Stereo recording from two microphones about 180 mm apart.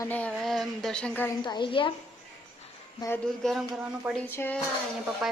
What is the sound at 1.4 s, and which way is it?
Speech, 25° left (ahead or behind).